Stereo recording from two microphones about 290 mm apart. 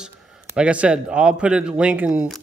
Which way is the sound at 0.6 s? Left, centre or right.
Centre.